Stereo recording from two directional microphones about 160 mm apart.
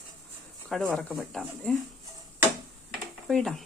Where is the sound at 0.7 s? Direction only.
Centre (ahead or behind).